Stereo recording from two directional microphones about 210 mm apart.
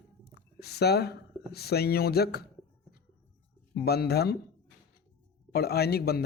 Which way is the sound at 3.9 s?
50° left (ahead or behind).